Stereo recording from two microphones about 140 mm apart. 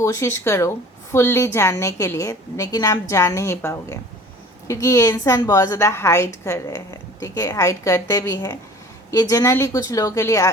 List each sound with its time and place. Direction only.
0.0 s a woman's voice: 20° left (ahead or behind)